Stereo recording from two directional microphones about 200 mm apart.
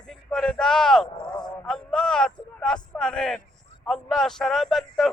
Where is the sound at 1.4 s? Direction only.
5° left (ahead or behind).